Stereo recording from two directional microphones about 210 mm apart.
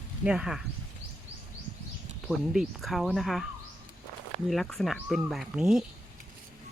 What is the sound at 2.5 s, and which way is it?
Speech, centre (ahead or behind).